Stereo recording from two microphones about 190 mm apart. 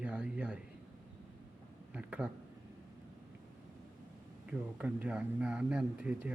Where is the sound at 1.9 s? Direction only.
5° right (ahead or behind).